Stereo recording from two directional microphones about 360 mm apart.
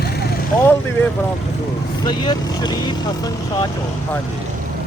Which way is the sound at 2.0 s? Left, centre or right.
Centre.